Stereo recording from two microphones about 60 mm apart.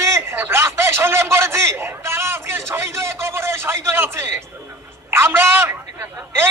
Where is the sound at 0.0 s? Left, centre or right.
Right.